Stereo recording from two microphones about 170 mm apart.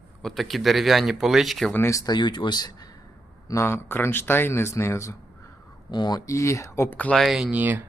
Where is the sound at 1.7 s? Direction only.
15° left (ahead or behind).